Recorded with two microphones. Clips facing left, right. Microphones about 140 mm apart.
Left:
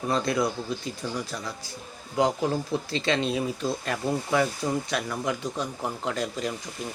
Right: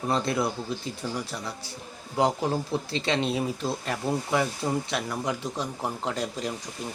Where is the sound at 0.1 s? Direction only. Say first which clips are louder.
Left 1 dB; 25° right (ahead or behind).